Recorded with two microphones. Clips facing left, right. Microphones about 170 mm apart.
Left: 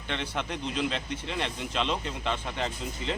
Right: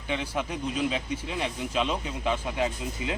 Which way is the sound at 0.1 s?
5° right (ahead or behind).